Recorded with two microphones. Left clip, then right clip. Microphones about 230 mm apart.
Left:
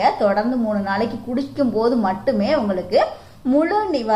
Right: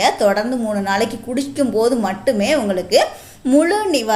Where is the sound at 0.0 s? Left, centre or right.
Right.